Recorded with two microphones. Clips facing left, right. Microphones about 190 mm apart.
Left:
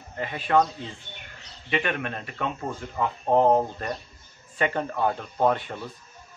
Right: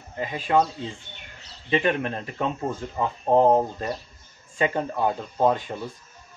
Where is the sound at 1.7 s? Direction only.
30° right (ahead or behind).